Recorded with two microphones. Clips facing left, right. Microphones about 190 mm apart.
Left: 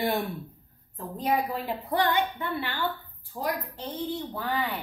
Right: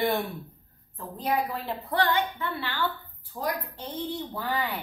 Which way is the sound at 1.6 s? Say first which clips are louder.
Left 1 dB; 15° left (ahead or behind).